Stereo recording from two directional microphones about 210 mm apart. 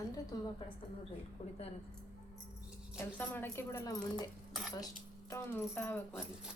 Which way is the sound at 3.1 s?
10° left (ahead or behind).